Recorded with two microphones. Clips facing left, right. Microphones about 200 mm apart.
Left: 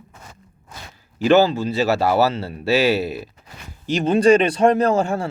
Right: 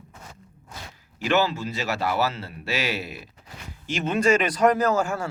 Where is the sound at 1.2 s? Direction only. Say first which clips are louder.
Left 8 dB; 35° left (ahead or behind).